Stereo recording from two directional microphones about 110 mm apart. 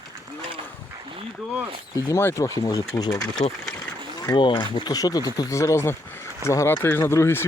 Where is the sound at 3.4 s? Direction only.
70° left (ahead or behind).